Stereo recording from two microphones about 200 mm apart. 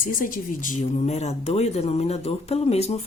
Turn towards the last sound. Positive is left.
turn(degrees=30)  # may be behind; listen again after turning